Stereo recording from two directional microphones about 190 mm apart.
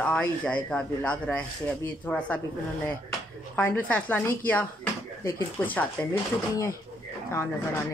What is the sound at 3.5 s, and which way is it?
Speech, 10° left (ahead or behind).